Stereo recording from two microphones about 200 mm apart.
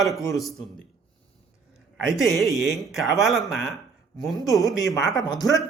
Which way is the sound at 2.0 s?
Centre (ahead or behind).